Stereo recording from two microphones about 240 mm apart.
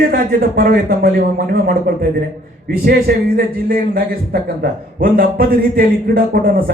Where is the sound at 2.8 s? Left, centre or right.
Right.